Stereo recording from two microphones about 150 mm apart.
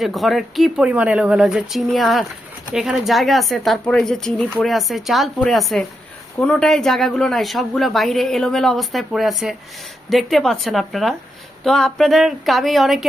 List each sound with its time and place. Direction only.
0.0 s speech: centre (ahead or behind)